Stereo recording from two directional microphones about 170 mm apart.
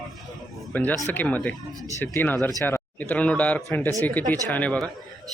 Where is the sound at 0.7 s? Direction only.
10° left (ahead or behind).